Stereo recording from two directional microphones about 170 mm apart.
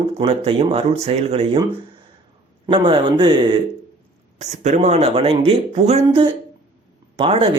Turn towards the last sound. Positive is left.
turn(degrees=-35)  # may be behind; listen again after turning